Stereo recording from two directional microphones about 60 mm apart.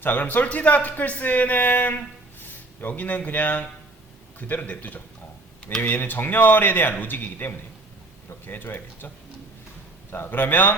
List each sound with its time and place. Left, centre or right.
0.0 s a man's voice: left